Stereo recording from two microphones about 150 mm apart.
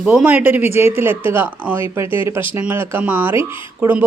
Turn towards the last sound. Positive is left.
turn(degrees=-10)  # may be behind; listen again after turning